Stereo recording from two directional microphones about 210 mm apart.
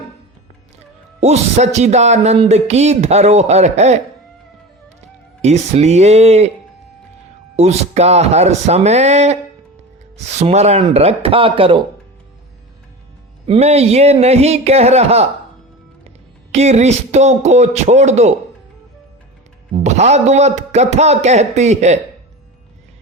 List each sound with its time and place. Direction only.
0.8 s speech: 30° right (ahead or behind)
7.5 s speech: 30° right (ahead or behind)
13.5 s speech: 30° right (ahead or behind)
16.0 s music: 30° right (ahead or behind)
19.7 s speech: 35° right (ahead or behind)